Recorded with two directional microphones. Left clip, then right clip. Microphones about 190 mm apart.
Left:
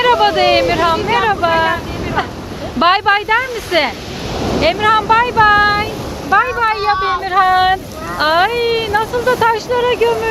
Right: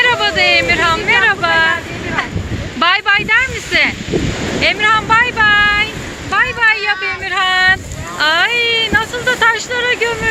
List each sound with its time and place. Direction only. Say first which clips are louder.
0.0 s vehicle: left 1 dB; 15° left (ahead or behind)
2.7 s speech: even; 20° left (ahead or behind)